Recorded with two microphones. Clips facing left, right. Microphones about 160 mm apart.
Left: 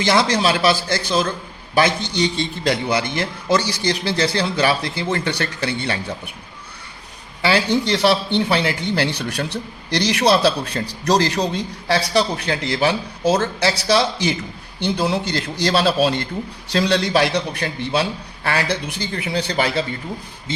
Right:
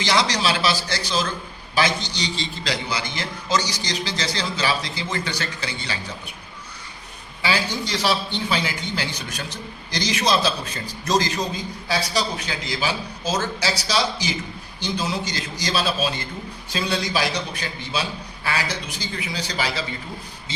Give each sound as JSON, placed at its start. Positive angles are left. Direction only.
{"t": 0.0, "sound": "a man's voice", "side_deg": 55}
{"t": 7.4, "sound": "a man's voice", "side_deg": 65}